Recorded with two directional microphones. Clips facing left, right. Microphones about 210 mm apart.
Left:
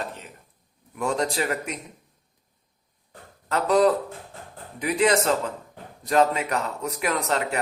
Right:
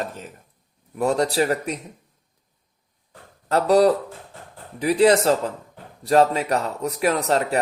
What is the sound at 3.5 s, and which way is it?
Speech, 35° right (ahead or behind).